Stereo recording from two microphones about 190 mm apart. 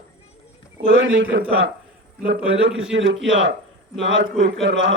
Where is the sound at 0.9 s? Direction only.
70° right (ahead or behind).